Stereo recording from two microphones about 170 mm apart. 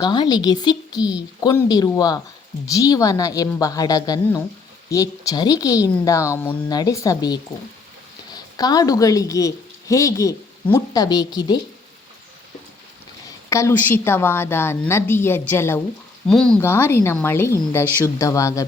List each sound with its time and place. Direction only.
0.0 s a woman's voice: 25° left (ahead or behind)
13.5 s speech: 15° left (ahead or behind)
16.2 s speech: 5° left (ahead or behind)